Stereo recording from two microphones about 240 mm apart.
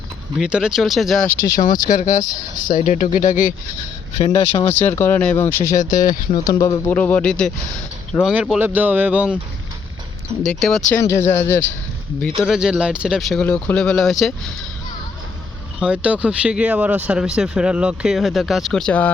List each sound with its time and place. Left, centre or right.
0.3 s speech: centre
1.4 s speech: centre
1.6 s speech: left
4.2 s speech: left
4.7 s speech: centre
5.7 s speech: left
6.3 s speech: centre
10.4 s speech: centre
11.0 s speech: centre
12.4 s speech: centre
15.8 s speech: centre